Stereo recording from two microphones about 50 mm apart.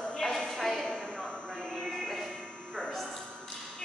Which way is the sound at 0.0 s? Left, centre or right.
Centre.